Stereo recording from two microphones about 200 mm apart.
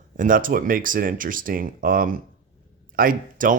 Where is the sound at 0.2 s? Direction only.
45° right (ahead or behind).